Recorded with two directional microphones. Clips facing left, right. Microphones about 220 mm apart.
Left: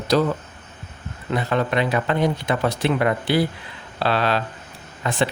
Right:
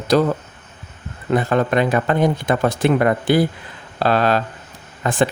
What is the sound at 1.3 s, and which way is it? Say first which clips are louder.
Speech: right 5 dB; 50° right (ahead or behind).